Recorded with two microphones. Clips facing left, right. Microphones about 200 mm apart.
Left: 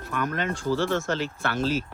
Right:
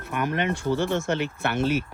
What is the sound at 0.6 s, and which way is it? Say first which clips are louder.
Speech: left 2 dB; 20° right (ahead or behind).